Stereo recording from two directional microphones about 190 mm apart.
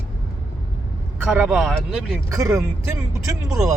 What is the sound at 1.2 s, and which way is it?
Speech, 5° right (ahead or behind).